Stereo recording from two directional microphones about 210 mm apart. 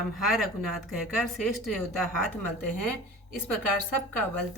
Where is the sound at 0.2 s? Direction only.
Centre (ahead or behind).